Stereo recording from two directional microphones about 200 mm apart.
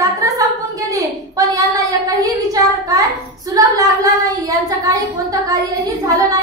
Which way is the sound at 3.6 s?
15° right (ahead or behind).